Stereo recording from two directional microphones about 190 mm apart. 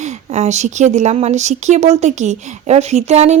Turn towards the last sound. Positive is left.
turn(degrees=-35)  # may be behind; listen again after turning